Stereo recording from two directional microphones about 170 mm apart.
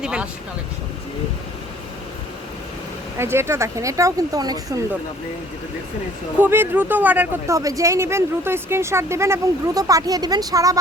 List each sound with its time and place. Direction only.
0.0 s vehicle: 5° right (ahead or behind)
3.2 s speech: 15° right (ahead or behind)
6.4 s speech: 10° right (ahead or behind)